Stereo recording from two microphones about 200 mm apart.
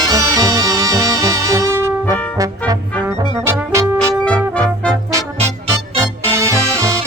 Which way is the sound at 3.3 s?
15° right (ahead or behind).